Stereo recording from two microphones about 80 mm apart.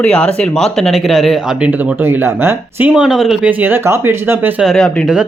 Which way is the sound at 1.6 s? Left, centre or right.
Centre.